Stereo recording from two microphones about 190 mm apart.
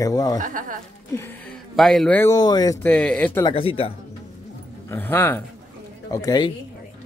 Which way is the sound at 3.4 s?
30° left (ahead or behind).